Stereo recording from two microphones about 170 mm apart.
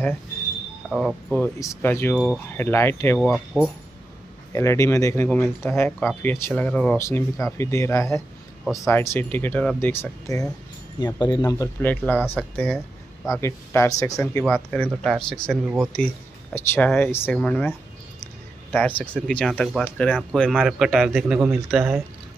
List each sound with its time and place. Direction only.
0.8 s speech: 5° right (ahead or behind)
1.3 s speech: 10° left (ahead or behind)
3.2 s a man's voice: centre (ahead or behind)
4.5 s speech: 15° left (ahead or behind)
14.2 s a man's voice: 5° left (ahead or behind)
15.5 s speech: 10° right (ahead or behind)
16.5 s a man's voice: 15° left (ahead or behind); by 21.7 s 10° right (ahead or behind)